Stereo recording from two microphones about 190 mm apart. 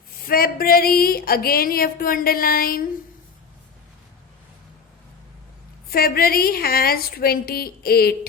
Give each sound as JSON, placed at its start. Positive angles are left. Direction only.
{"t": 0.3, "sound": "a woman's voice", "side_deg": 50}
{"t": 5.9, "sound": "a woman's voice", "side_deg": 55}